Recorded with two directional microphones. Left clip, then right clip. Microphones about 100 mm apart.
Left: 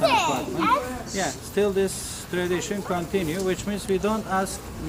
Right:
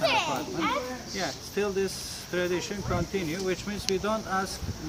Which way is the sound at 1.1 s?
5° right (ahead or behind).